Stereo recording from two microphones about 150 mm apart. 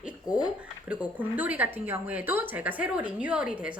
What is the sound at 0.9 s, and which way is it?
Speech, 10° right (ahead or behind).